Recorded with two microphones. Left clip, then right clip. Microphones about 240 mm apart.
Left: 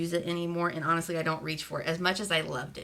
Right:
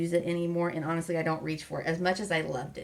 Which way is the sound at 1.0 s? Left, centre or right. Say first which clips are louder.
Right 1 dB; left.